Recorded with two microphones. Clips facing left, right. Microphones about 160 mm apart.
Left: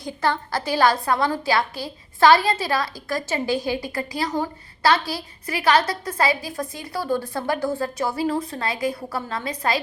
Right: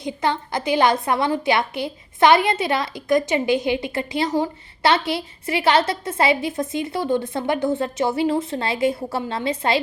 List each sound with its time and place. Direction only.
0.0 s a woman's voice: 20° right (ahead or behind)